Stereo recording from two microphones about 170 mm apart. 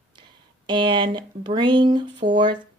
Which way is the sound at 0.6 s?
25° right (ahead or behind).